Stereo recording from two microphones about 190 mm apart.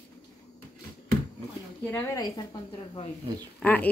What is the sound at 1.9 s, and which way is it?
Speech, 20° left (ahead or behind).